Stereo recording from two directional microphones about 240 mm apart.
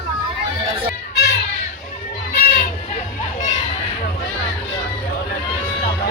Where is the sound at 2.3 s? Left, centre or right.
Left.